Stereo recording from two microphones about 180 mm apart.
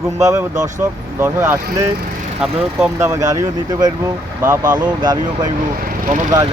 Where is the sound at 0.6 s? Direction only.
15° right (ahead or behind).